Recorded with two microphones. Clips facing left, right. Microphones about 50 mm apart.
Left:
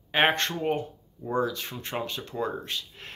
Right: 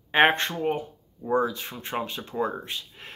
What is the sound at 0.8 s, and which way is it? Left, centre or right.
Speech, centre.